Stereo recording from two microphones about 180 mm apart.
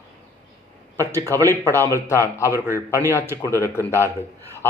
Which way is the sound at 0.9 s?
15° right (ahead or behind).